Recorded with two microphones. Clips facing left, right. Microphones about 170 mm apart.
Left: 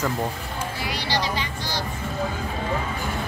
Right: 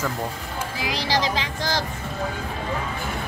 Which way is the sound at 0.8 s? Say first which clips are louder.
Right 3 dB; 90° right.